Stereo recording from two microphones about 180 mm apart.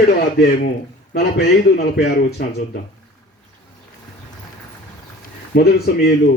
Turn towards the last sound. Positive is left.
turn(degrees=60)  # may be behind; listen again after turning